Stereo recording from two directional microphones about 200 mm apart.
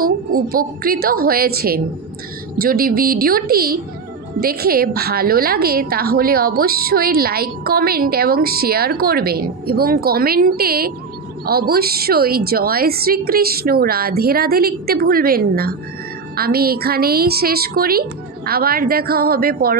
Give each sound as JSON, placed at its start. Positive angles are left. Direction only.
{"t": 0.0, "sound": "a woman's voice", "side_deg": -45}